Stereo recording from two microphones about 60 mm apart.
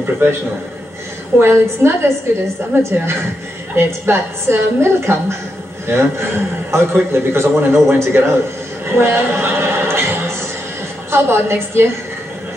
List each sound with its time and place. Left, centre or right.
0.0 s a man's voice: right
1.4 s a man's voice: right
8.8 s a sound: right
11.1 s a man's voice: right